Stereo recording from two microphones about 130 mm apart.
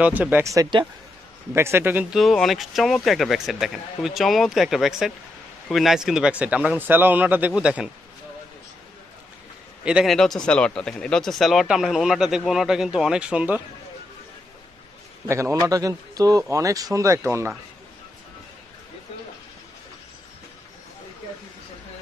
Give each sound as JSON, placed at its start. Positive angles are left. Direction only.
{"t": 0.0, "sound": "speech", "side_deg": -10}
{"t": 1.5, "sound": "speech", "side_deg": -20}
{"t": 2.1, "sound": "speech", "side_deg": 0}
{"t": 9.8, "sound": "speech", "side_deg": -5}
{"t": 10.1, "sound": "speech", "side_deg": 5}
{"t": 15.2, "sound": "a man's voice", "side_deg": -20}